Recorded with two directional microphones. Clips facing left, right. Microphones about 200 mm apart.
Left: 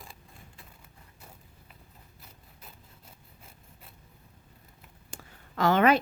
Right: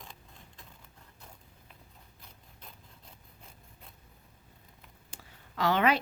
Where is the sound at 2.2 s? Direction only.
5° left (ahead or behind).